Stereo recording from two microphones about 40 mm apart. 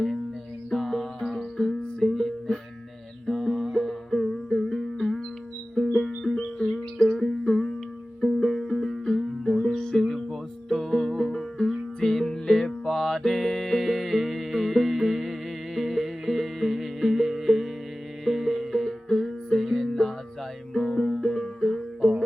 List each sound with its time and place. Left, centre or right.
0.7 s music: centre
10.7 s music: centre